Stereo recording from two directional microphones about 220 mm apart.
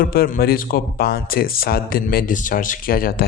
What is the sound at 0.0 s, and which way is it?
A man's voice, 40° left (ahead or behind).